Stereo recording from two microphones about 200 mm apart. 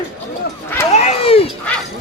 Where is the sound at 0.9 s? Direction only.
30° left (ahead or behind).